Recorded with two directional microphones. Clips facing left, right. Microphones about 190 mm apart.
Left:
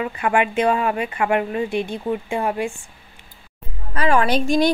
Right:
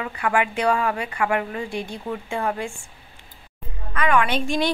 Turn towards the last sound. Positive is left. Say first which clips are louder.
# left 4 dB
turn(degrees=40)  # may be behind; listen again after turning